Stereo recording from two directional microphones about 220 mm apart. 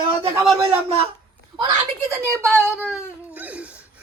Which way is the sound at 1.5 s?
20° right (ahead or behind).